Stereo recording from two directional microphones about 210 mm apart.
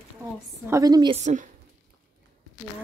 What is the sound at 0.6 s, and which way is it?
Speech, 15° right (ahead or behind).